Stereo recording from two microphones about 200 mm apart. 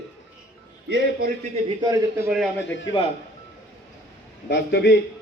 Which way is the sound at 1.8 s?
15° right (ahead or behind).